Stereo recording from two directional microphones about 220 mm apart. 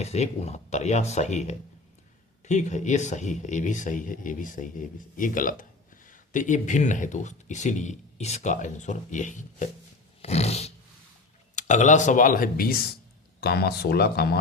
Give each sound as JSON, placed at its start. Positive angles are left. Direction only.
{"t": 0.0, "sound": "speech", "side_deg": 30}
{"t": 10.2, "sound": "roar", "side_deg": 30}
{"t": 11.5, "sound": "speech", "side_deg": 35}